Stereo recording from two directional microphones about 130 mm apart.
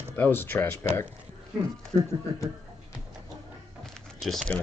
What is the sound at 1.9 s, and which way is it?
Speech, 45° right (ahead or behind).